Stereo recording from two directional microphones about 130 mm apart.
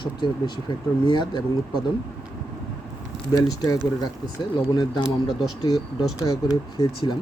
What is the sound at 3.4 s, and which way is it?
Speech, 30° left (ahead or behind).